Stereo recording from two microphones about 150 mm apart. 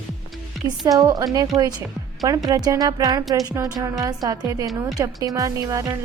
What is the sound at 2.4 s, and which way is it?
A woman's voice, 25° right (ahead or behind).